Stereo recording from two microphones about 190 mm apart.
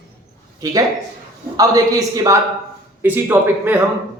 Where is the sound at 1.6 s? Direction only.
20° right (ahead or behind).